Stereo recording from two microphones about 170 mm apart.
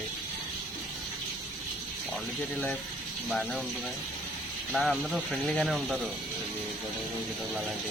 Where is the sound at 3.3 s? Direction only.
Centre (ahead or behind).